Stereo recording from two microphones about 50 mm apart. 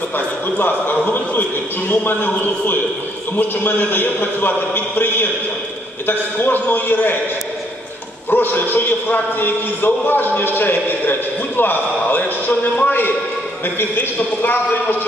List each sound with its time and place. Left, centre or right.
0.6 s a man's voice: left
2.4 s a man's voice: left
8.3 s a man's voice: left